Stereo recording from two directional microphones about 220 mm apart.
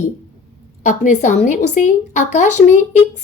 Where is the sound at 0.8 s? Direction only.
35° left (ahead or behind).